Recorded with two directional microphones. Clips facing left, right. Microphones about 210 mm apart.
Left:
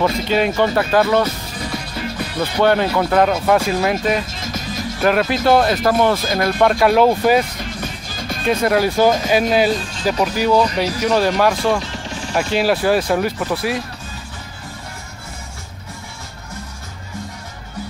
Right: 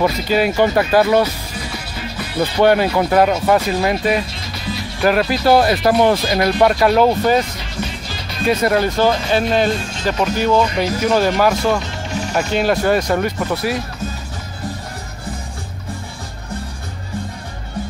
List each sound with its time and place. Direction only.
0.0 s speech: 5° right (ahead or behind)
2.6 s speech: 10° right (ahead or behind)
4.3 s music: 45° left (ahead or behind)
5.0 s speech: centre (ahead or behind)
6.6 s speech: centre (ahead or behind)
7.5 s music: 50° left (ahead or behind)
8.5 s speech: centre (ahead or behind)
12.1 s music: 40° right (ahead or behind)
12.5 s speech: 5° left (ahead or behind)